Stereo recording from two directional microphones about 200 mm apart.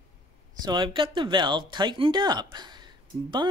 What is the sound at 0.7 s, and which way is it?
Speech, 25° right (ahead or behind).